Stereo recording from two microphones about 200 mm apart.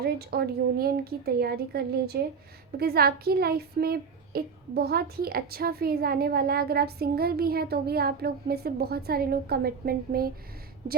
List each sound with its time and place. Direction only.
0.0 s a woman's voice: 50° right (ahead or behind)